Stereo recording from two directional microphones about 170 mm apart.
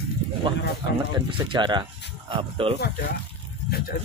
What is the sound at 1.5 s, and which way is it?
Speech, 25° right (ahead or behind).